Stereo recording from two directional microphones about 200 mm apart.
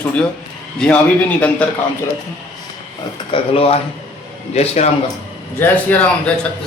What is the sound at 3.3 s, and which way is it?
A man's voice, 30° left (ahead or behind).